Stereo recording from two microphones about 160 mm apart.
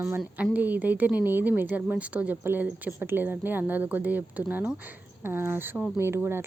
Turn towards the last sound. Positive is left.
turn(degrees=-15)  # may be behind; listen again after turning